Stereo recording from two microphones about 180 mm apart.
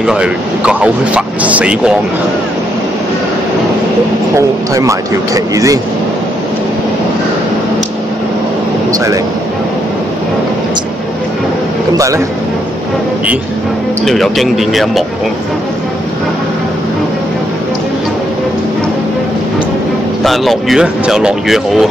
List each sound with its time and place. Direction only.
0.0 s speech: 5° right (ahead or behind)
4.4 s speech: 20° right (ahead or behind)
8.9 s speech: 20° right (ahead or behind)
14.0 s speech: centre (ahead or behind)
20.2 s speech: centre (ahead or behind)